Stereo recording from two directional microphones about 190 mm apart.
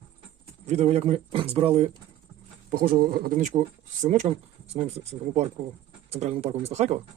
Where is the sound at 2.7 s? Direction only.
50° right (ahead or behind).